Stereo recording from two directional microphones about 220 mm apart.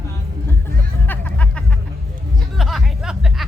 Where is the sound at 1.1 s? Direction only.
5° left (ahead or behind).